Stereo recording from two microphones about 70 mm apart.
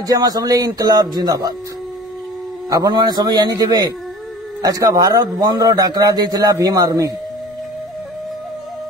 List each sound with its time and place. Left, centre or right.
0.0 s a man's voice: right
2.7 s a man's voice: right